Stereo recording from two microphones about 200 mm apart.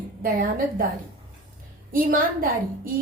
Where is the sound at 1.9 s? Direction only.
45° right (ahead or behind).